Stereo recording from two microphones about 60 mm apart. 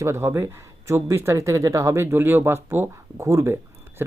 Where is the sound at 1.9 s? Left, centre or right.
Right.